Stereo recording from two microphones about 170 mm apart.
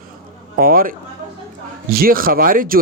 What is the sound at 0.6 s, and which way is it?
Speech, 60° right (ahead or behind).